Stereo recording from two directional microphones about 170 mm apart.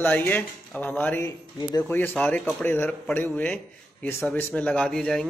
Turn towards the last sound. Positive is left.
turn(degrees=5)  # may be behind; listen again after turning